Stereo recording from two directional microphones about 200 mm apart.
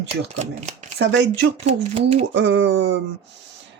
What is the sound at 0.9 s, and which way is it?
Speech, 60° right (ahead or behind).